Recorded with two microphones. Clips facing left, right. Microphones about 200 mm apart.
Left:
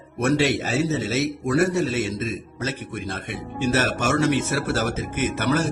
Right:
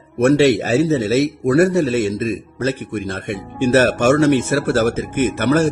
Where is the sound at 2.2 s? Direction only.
55° right (ahead or behind).